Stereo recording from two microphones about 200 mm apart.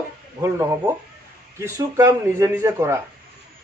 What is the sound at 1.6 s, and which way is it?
A man's voice, 15° right (ahead or behind).